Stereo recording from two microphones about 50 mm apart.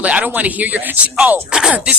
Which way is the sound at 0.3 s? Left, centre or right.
Right.